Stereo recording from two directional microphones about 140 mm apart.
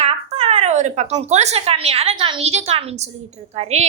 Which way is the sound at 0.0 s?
50° right (ahead or behind).